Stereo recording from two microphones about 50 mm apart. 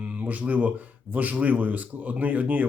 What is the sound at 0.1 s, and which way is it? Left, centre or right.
Speech, right.